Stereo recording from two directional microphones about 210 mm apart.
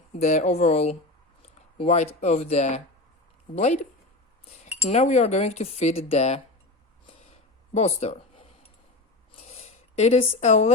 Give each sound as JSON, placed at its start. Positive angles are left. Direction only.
{"t": 0.2, "sound": "cutlery", "side_deg": 35}
{"t": 1.4, "sound": "speech", "side_deg": 35}
{"t": 3.5, "sound": "cutlery", "side_deg": 30}
{"t": 7.1, "sound": "a sound", "side_deg": 30}
{"t": 9.3, "sound": "zipper", "side_deg": 30}